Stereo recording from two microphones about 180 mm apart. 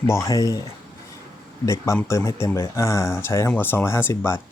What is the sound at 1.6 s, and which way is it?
Speech, 15° left (ahead or behind).